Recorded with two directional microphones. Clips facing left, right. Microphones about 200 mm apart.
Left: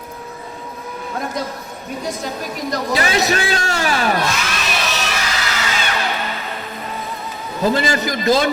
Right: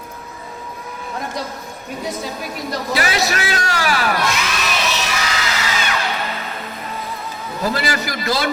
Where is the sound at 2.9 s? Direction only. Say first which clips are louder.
Left 2 dB; 25° left (ahead or behind).